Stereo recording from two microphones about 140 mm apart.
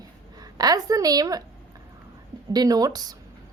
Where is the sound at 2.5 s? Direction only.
25° right (ahead or behind).